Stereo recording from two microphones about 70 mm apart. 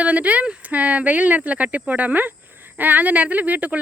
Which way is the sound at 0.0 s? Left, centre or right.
Centre.